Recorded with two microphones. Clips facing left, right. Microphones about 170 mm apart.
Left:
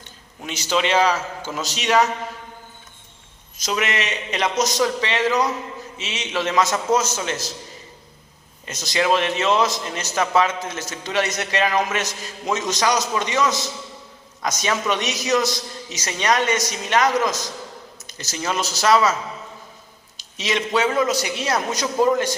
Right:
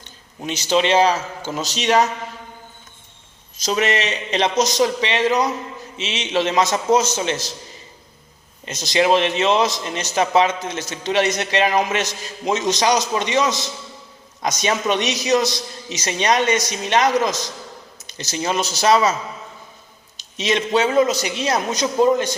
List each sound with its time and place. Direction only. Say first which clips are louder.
0.4 s a man's voice: right 4 dB; 25° right (ahead or behind)
3.6 s a man's voice: right 4 dB; 35° right (ahead or behind)
8.6 s a man's voice: right 3 dB; 20° right (ahead or behind)
18.3 s a man's voice: right 3 dB; 20° right (ahead or behind)
20.1 s a man's voice: right 3 dB; 20° right (ahead or behind)